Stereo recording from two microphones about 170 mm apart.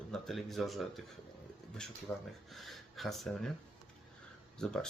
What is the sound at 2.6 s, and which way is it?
Speech, centre (ahead or behind).